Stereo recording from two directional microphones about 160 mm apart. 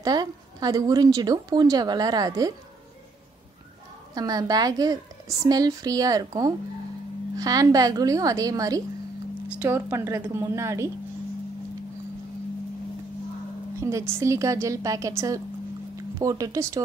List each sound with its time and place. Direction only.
0.0 s a woman's voice: 25° right (ahead or behind)
4.1 s a woman's voice: 25° right (ahead or behind)
13.7 s a sound: 20° right (ahead or behind)
14.2 s a woman's voice: 20° right (ahead or behind)